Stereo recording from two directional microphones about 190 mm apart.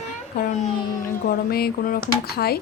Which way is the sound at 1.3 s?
50° left (ahead or behind).